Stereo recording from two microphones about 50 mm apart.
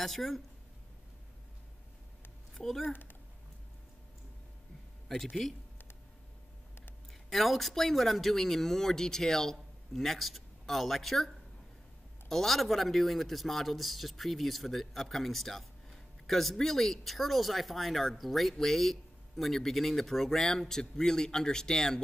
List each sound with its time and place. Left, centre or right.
0.0 s a man's voice: centre
2.5 s speech: centre
2.8 s speech: left
5.0 s speech: centre
7.2 s a man's voice: centre
12.3 s a man's voice: centre